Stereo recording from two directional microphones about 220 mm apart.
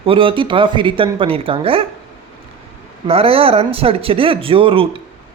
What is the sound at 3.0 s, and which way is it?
Speech, 25° right (ahead or behind).